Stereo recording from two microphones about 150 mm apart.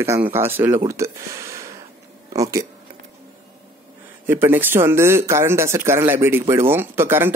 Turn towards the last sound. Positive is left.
turn(degrees=-15)  # may be behind; listen again after turning